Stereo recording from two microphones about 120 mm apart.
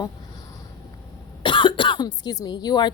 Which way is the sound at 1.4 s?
45° left (ahead or behind).